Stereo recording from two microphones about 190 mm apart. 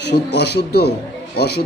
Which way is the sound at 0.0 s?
60° left (ahead or behind).